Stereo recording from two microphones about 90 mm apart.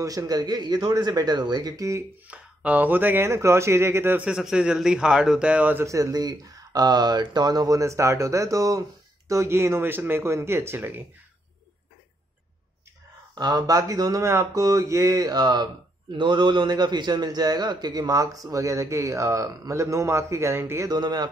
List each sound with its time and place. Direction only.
0.0 s a man's voice: 40° right (ahead or behind)
2.2 s speech: 15° right (ahead or behind)
4.2 s a man's voice: 5° right (ahead or behind)
5.9 s speech: 35° right (ahead or behind)
6.1 s speech: 45° right (ahead or behind); by 11.1 s 25° right (ahead or behind)
13.3 s speech: 50° right (ahead or behind)
16.1 s a man's voice: 60° right (ahead or behind); by 20.9 s 30° right (ahead or behind)
20.9 s a man's voice: 50° right (ahead or behind)